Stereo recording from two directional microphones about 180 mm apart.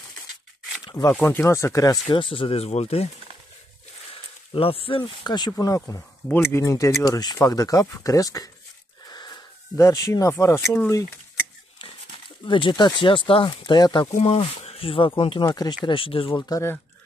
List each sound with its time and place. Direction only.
0.8 s speech: 20° left (ahead or behind)
4.6 s speech: 30° left (ahead or behind); by 11.1 s 15° left (ahead or behind)
12.4 s speech: 25° left (ahead or behind)